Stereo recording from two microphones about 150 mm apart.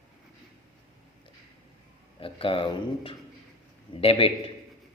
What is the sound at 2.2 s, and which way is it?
Speech, 35° left (ahead or behind).